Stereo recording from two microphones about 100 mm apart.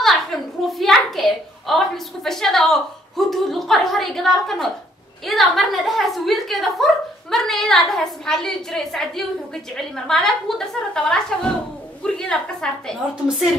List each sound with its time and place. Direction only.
0.0 s a woman's voice: centre (ahead or behind)